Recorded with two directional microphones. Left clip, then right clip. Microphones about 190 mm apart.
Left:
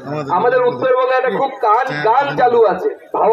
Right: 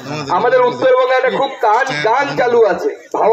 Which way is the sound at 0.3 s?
30° left (ahead or behind).